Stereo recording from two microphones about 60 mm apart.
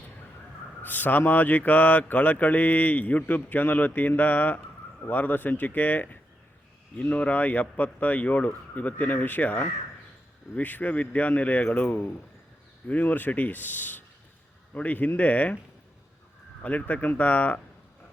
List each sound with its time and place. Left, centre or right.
0.8 s speech: left
16.6 s speech: left